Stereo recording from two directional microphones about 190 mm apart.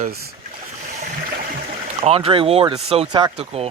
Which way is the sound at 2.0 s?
30° right (ahead or behind).